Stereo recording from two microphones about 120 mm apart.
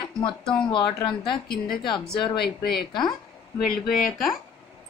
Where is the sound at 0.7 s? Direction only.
40° left (ahead or behind).